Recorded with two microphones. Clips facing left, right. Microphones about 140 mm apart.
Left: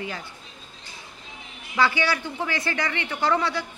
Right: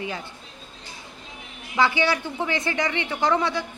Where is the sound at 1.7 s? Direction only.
20° right (ahead or behind).